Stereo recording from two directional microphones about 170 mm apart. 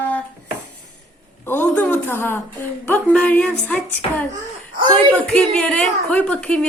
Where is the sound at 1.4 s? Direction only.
10° left (ahead or behind).